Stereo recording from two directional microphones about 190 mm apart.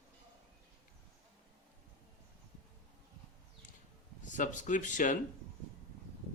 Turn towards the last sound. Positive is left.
turn(degrees=40)  # may be behind; listen again after turning